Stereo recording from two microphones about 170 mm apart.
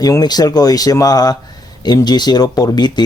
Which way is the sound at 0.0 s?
20° left (ahead or behind).